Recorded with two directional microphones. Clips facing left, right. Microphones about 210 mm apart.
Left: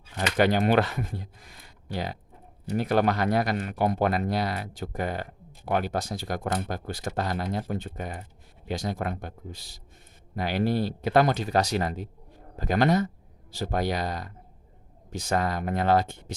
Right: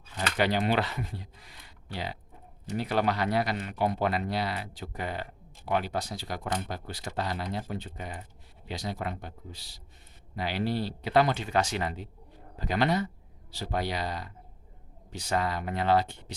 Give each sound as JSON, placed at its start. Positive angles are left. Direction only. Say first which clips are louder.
{"t": 0.3, "sound": "speech", "louder": "left 5 dB", "side_deg": 50}